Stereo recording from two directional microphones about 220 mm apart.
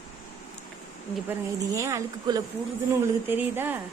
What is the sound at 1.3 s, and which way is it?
Speech, 15° right (ahead or behind).